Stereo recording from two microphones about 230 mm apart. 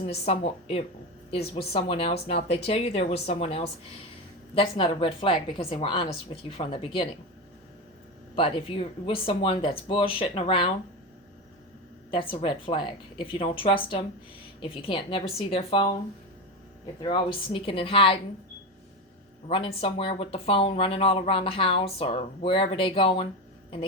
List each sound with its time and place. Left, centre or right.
0.0 s speech: left
8.4 s speech: left
12.1 s speech: left
17.0 s speech: left
19.5 s speech: left